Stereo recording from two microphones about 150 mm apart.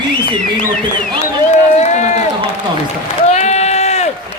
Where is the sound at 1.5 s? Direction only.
50° left (ahead or behind).